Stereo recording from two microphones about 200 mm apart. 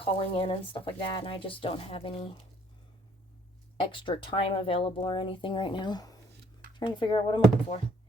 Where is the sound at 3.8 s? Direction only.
25° left (ahead or behind).